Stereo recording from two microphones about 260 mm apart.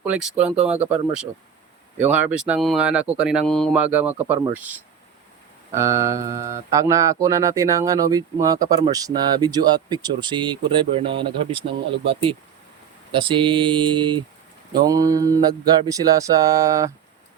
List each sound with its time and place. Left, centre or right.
0.0 s speech: centre
2.0 s speech: centre
5.7 s mantra: centre
12.0 s speech: centre
14.8 s mantra: centre